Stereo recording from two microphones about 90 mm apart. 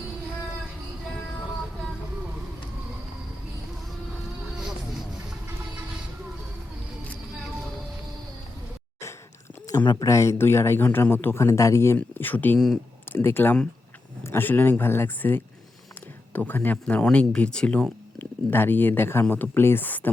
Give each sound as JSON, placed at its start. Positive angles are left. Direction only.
{"t": 9.8, "sound": "speech", "side_deg": 50}
{"t": 10.1, "sound": "speech", "side_deg": 30}
{"t": 11.4, "sound": "speech", "side_deg": 35}
{"t": 11.9, "sound": "speech", "side_deg": 20}
{"t": 18.5, "sound": "speech", "side_deg": 20}